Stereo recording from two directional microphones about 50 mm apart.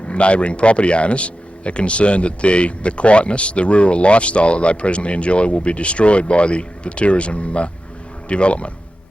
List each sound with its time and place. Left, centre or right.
0.1 s speech: left